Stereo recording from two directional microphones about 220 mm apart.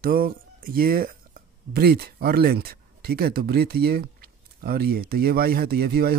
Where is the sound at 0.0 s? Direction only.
45° right (ahead or behind).